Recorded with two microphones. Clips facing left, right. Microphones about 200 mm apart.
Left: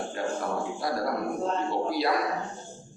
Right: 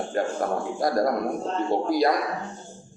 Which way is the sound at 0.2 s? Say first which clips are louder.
Right 6 dB; 45° right (ahead or behind).